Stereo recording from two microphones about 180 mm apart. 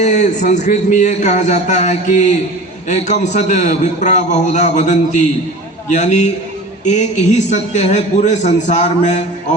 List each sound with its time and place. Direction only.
0.0 s a man's voice: 40° left (ahead or behind)